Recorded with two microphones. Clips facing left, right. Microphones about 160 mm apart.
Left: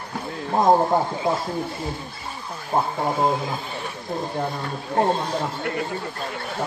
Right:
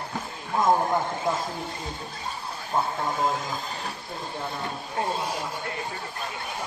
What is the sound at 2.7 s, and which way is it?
Speech, 50° left (ahead or behind).